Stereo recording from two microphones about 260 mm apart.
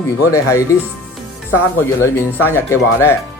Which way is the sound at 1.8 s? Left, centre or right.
Centre.